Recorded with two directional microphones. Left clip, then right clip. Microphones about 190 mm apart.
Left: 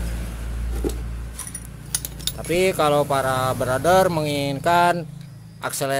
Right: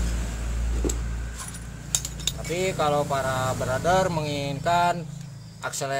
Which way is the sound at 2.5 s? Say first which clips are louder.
Left 6 dB; 45° left (ahead or behind).